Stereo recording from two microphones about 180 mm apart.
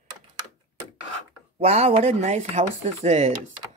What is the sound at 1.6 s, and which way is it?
Speech, 35° right (ahead or behind).